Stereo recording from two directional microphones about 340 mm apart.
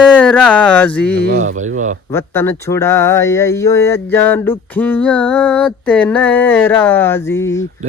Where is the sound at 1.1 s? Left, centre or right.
Right.